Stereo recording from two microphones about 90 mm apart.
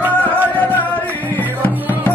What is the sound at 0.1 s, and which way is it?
Music, 15° left (ahead or behind).